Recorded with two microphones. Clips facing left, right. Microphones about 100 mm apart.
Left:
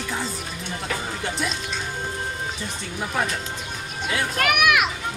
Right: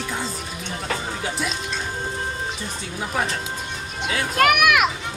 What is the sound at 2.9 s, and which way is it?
Speech, centre (ahead or behind).